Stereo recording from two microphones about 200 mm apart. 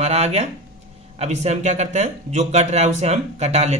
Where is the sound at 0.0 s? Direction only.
35° right (ahead or behind).